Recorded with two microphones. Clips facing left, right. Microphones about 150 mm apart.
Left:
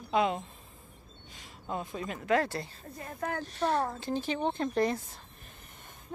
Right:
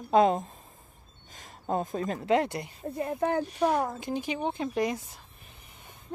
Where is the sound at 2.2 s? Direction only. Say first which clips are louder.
Right 1 dB; 20° right (ahead or behind).